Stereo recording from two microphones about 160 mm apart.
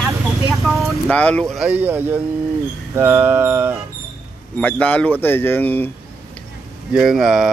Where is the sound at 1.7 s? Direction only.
10° right (ahead or behind).